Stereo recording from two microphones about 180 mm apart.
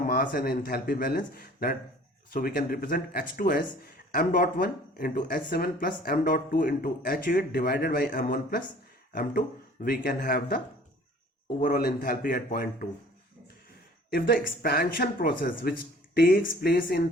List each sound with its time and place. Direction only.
0.0 s speech: 50° left (ahead or behind)
9.8 s speech: 50° left (ahead or behind)
14.1 s speech: 55° left (ahead or behind)